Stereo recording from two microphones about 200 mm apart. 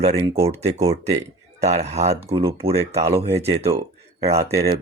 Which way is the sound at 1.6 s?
35° right (ahead or behind).